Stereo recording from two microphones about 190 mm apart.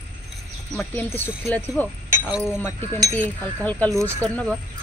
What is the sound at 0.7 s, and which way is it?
Speech, 10° left (ahead or behind).